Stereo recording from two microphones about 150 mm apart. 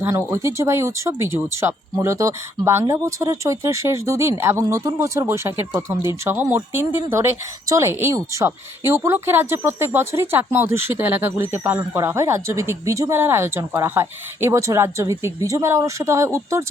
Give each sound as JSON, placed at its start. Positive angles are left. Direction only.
{"t": 0.0, "sound": "speech", "side_deg": -15}